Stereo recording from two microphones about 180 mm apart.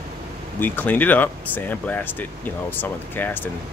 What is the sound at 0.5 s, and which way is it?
Speech, 10° left (ahead or behind).